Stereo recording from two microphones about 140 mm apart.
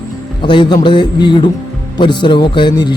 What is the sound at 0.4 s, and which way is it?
Speech, 35° left (ahead or behind).